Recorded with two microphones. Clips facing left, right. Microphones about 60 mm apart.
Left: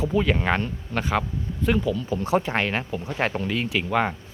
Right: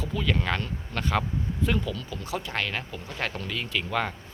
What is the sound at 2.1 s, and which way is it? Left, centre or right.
Speech, left.